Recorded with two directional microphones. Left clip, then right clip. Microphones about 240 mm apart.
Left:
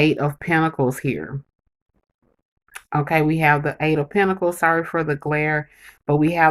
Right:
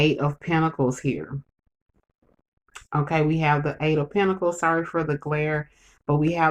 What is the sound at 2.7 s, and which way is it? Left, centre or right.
Speech, left.